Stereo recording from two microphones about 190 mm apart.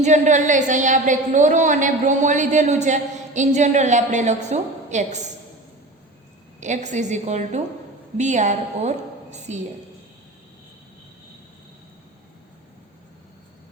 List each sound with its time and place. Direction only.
0.0 s a woman's voice: 40° right (ahead or behind)
6.6 s a woman's voice: 40° right (ahead or behind)